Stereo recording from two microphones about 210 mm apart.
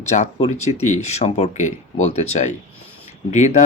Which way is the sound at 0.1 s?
30° left (ahead or behind).